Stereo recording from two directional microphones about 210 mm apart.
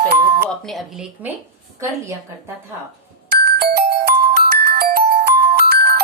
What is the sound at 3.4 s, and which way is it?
Music, 45° right (ahead or behind).